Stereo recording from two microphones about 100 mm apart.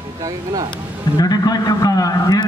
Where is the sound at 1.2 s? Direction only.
40° left (ahead or behind).